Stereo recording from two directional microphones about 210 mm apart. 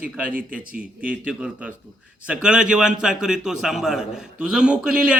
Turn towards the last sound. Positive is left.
turn(degrees=-5)  # may be behind; listen again after turning